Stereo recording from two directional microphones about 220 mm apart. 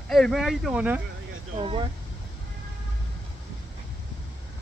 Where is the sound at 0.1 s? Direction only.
Centre (ahead or behind).